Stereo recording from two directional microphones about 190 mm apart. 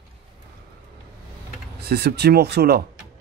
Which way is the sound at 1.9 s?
60° right (ahead or behind).